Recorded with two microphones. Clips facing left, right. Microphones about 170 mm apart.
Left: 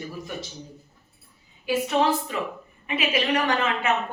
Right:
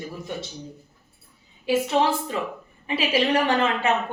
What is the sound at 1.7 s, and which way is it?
A woman's voice, 30° right (ahead or behind).